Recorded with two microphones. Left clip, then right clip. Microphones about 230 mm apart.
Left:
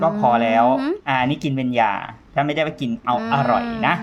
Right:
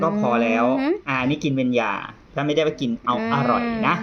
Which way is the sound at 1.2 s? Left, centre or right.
Left.